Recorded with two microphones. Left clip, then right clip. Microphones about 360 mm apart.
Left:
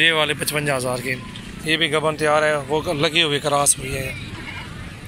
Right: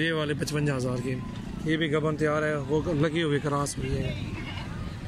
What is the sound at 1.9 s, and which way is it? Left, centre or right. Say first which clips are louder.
Speech: left 8 dB; centre.